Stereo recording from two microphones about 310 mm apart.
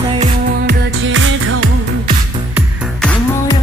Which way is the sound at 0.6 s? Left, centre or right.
Right.